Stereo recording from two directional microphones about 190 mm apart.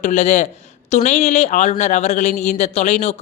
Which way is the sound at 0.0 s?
40° left (ahead or behind).